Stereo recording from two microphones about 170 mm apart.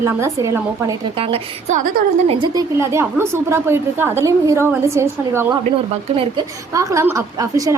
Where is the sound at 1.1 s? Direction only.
35° right (ahead or behind).